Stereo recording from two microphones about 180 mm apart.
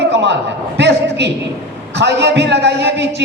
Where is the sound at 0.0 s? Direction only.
75° right (ahead or behind).